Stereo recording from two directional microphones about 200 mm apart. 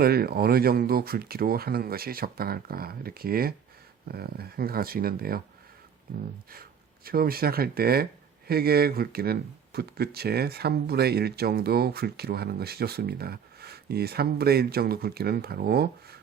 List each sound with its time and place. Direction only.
0.0 s speech: 50° right (ahead or behind)
6.5 s speech: 45° right (ahead or behind)